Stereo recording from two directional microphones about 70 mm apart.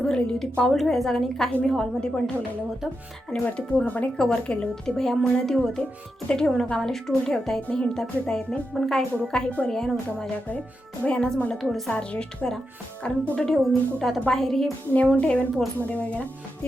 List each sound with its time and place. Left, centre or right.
0.0 s a woman's voice: centre
3.4 s a woman's voice: centre
9.2 s a woman's voice: centre
11.5 s a woman's voice: centre
11.9 s a woman's voice: centre
14.9 s a woman's voice: centre